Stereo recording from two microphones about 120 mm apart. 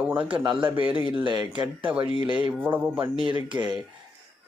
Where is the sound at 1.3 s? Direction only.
40° right (ahead or behind).